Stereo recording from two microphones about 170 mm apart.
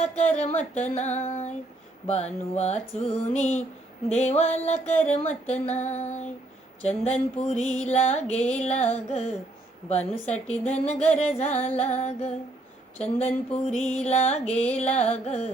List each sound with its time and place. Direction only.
0.1 s music: 40° left (ahead or behind)